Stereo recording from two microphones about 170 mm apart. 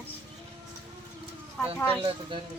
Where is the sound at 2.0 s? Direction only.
30° right (ahead or behind).